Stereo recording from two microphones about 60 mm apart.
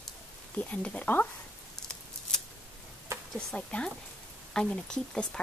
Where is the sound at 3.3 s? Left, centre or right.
Centre.